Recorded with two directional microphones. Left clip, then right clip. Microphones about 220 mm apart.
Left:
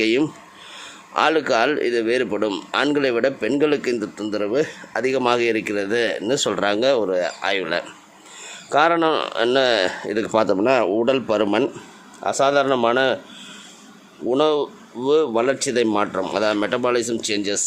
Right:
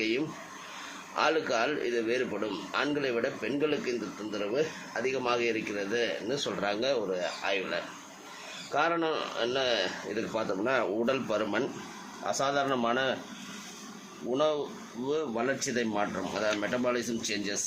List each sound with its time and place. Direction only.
0.0 s a man's voice: 50° left (ahead or behind)
14.3 s a man's voice: 45° left (ahead or behind)